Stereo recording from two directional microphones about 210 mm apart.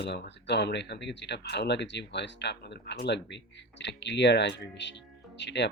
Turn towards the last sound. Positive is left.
turn(degrees=55)  # may be behind; listen again after turning